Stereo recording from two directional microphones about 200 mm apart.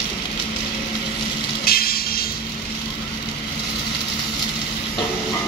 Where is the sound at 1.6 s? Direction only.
50° left (ahead or behind).